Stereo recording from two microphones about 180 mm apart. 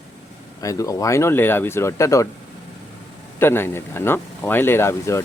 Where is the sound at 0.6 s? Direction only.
20° left (ahead or behind).